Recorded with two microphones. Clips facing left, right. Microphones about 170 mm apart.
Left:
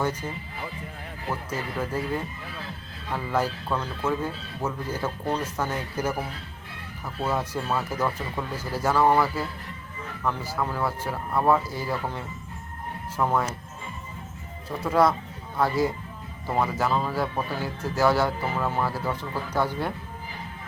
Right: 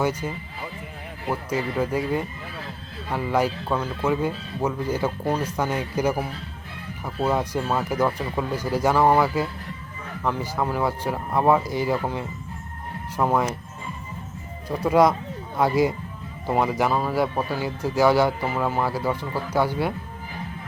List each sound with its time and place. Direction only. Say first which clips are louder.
0.0 s speech: right 3 dB; 10° right (ahead or behind)
3.1 s speech: right 4 dB; 15° right (ahead or behind)
14.8 s speech: right 4 dB; 15° right (ahead or behind)